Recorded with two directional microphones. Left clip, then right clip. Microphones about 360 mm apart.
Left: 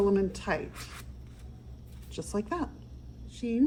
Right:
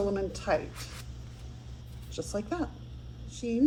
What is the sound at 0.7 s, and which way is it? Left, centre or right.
Speech, centre.